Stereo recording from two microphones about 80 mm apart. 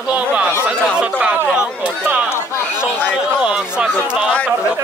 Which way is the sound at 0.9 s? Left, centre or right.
Centre.